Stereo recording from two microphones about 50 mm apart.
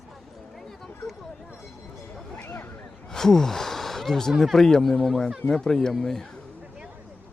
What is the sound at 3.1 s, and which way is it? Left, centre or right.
A man's voice, centre.